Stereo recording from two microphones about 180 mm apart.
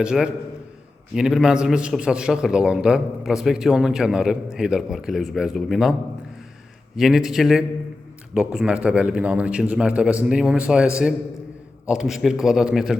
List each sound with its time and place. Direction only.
0.0 s a man's voice: 5° right (ahead or behind)
6.9 s a man's voice: centre (ahead or behind)